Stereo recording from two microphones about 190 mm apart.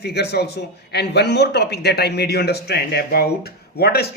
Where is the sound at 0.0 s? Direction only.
60° left (ahead or behind).